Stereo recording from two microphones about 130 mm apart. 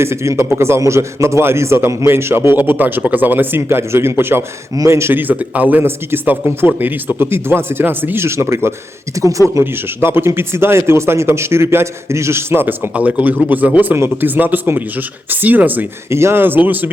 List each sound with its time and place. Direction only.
0.0 s a man's voice: 20° right (ahead or behind)